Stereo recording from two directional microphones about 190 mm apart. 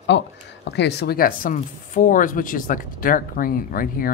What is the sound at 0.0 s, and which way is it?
Speech, 65° left (ahead or behind).